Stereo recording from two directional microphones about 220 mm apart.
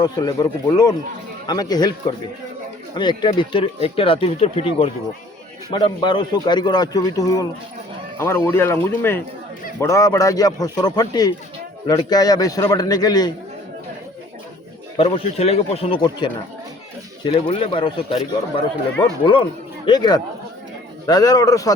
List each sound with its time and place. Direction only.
0.0 s speech: 15° left (ahead or behind)
2.9 s speech: 20° left (ahead or behind)
14.9 s speech: 25° left (ahead or behind)
19.2 s speech: 20° left (ahead or behind)